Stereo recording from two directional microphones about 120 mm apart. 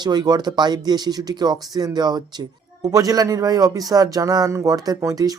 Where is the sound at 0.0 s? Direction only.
35° right (ahead or behind).